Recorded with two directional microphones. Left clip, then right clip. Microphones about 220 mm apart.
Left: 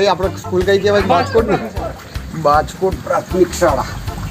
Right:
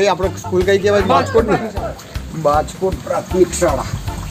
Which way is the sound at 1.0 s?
35° right (ahead or behind).